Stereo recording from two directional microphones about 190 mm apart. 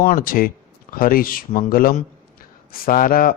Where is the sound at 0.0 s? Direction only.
45° left (ahead or behind).